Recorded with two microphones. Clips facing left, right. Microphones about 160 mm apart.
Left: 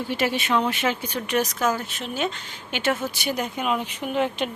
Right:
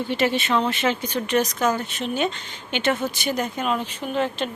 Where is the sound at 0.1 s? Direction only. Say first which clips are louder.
Right 1 dB; 10° left (ahead or behind).